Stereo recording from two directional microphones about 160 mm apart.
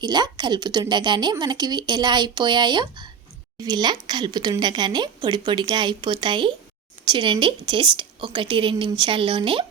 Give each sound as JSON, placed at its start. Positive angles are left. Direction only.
{"t": 0.0, "sound": "a woman's voice", "side_deg": -25}